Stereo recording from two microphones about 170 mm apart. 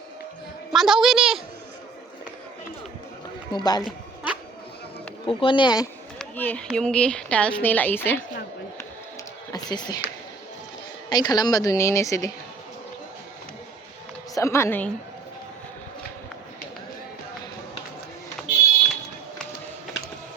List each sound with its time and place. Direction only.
0.7 s a woman's voice: centre (ahead or behind)
3.5 s speech: 25° left (ahead or behind)
3.8 s music: 5° right (ahead or behind)
5.2 s speech: 30° left (ahead or behind)
6.1 s a sound: 10° left (ahead or behind)
6.7 s a woman's voice: 5° left (ahead or behind)
9.5 s speech: 25° left (ahead or behind)
11.1 s speech: 25° left (ahead or behind)
14.3 s a woman's voice: 15° left (ahead or behind)
18.4 s a sound: centre (ahead or behind)